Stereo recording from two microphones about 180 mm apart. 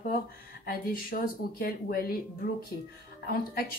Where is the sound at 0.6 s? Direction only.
55° left (ahead or behind).